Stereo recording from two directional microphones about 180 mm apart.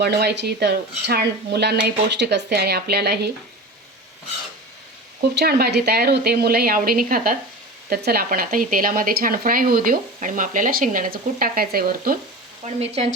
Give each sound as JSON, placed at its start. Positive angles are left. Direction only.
{"t": 0.0, "sound": "speech", "side_deg": -70}
{"t": 5.2, "sound": "speech", "side_deg": -65}
{"t": 12.8, "sound": "speech", "side_deg": -35}